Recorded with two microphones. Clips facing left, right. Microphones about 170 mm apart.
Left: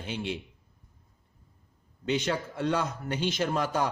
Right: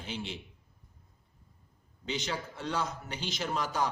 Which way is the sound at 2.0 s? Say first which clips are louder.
Left 7 dB; 55° left (ahead or behind).